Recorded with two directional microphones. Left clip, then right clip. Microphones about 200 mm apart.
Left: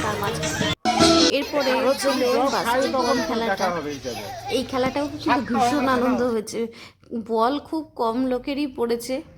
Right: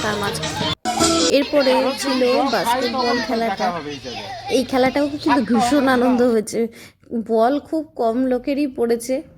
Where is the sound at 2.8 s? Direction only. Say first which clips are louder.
Right 1 dB; 65° left (ahead or behind).